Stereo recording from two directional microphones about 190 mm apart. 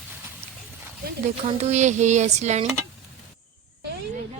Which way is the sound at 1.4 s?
35° right (ahead or behind).